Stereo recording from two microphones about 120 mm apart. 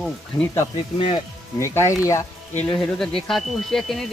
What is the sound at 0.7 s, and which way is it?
Speech, 50° left (ahead or behind).